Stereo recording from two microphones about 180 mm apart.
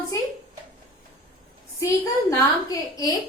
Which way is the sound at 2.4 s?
20° left (ahead or behind).